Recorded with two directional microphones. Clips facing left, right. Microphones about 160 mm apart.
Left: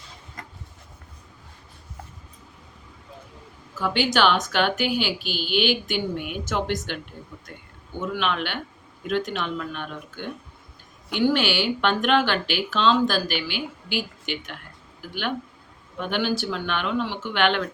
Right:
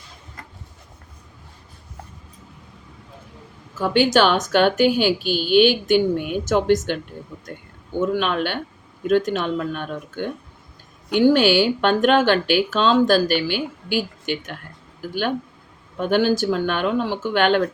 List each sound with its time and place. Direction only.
3.8 s speech: 45° right (ahead or behind)
16.0 s speech: 45° right (ahead or behind)